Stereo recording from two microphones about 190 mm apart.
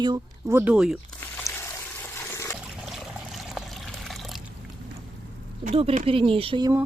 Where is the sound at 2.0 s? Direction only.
10° left (ahead or behind).